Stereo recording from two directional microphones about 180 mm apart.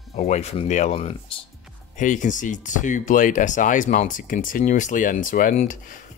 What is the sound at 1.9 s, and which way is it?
Speech, 45° left (ahead or behind).